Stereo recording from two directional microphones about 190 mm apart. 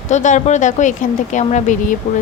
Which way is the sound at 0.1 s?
40° left (ahead or behind).